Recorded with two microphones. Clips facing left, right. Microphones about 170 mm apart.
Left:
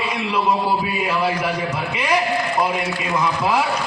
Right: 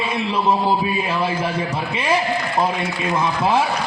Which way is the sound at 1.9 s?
25° right (ahead or behind).